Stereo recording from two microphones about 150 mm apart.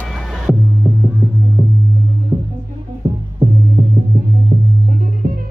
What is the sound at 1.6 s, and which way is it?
Music, 15° right (ahead or behind).